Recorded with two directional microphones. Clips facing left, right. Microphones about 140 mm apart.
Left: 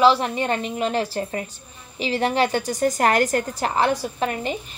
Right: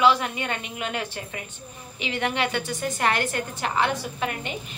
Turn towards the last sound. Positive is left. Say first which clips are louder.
# left 5 dB
turn(degrees=35)  # may be behind; listen again after turning